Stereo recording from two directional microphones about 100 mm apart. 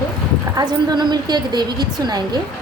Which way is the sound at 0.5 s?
45° right (ahead or behind).